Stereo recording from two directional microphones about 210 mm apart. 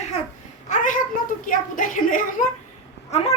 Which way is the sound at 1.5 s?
40° left (ahead or behind).